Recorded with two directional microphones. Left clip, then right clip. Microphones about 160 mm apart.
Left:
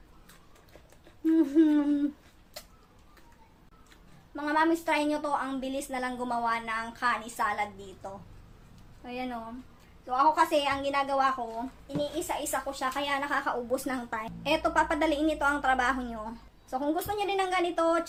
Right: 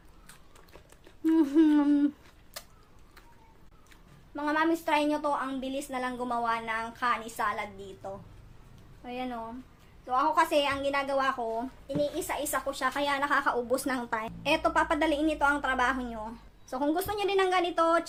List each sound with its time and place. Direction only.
1.2 s humming: 25° right (ahead or behind)
4.4 s a woman's voice: 10° right (ahead or behind)
11.9 s a woman's voice: 35° right (ahead or behind); by 16.4 s centre (ahead or behind)
16.6 s a woman's voice: 20° right (ahead or behind)